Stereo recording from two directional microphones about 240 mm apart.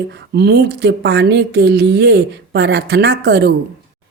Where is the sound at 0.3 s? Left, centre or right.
Right.